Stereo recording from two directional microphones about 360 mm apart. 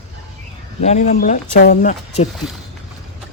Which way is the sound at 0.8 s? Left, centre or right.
Centre.